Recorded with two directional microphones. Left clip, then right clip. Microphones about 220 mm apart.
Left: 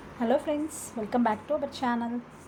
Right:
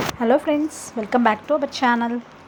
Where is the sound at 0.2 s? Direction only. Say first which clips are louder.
Right 7 dB; 25° right (ahead or behind).